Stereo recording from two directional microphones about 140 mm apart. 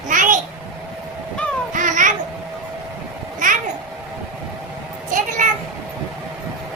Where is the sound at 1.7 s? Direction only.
65° right (ahead or behind).